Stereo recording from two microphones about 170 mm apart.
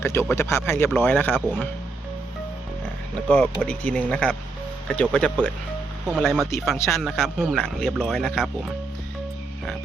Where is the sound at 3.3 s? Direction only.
5° left (ahead or behind).